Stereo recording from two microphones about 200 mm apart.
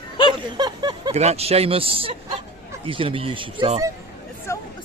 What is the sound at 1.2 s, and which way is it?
A man's voice, 30° right (ahead or behind).